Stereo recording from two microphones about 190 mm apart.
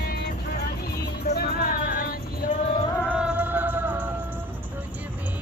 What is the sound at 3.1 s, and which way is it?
Music, 5° right (ahead or behind).